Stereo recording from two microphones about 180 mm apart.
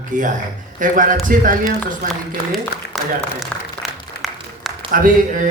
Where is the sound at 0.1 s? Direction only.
45° right (ahead or behind).